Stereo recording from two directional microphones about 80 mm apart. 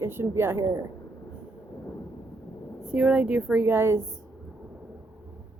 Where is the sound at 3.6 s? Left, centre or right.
Right.